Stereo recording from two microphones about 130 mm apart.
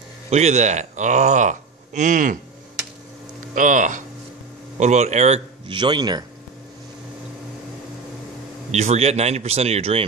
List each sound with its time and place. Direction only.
0.3 s speech: 60° right (ahead or behind); by 2.3 s 75° right (ahead or behind)
3.5 s speech: 85° right
4.7 s speech: 65° right (ahead or behind)
5.7 s a man's voice: 35° right (ahead or behind)
8.7 s speech: 55° right (ahead or behind)